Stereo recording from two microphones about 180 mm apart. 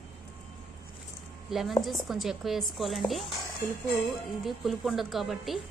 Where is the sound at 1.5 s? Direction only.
Centre (ahead or behind).